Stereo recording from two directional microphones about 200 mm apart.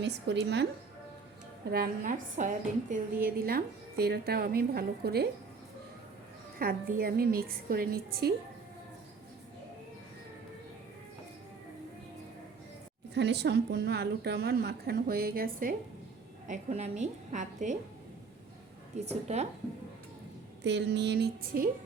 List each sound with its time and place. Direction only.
0.0 s music: 60° right (ahead or behind)
1.7 s a woman's voice: 45° right (ahead or behind)
6.6 s a woman's voice: 50° right (ahead or behind)
13.1 s a woman's voice: 55° right (ahead or behind)
16.5 s a woman's voice: 35° right (ahead or behind)
18.9 s a woman's voice: 35° right (ahead or behind)
20.7 s music: 60° right (ahead or behind)